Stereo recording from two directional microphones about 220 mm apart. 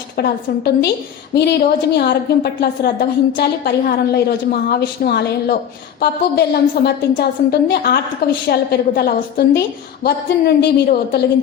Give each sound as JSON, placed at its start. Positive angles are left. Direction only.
{"t": 0.2, "sound": "a woman's voice", "side_deg": 50}